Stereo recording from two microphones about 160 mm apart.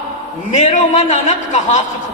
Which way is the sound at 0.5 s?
50° left (ahead or behind).